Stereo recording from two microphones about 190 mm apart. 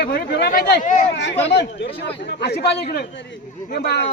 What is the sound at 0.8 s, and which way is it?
Speech, 35° left (ahead or behind).